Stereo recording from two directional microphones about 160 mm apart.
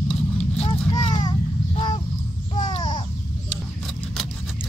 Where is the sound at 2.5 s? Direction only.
25° left (ahead or behind).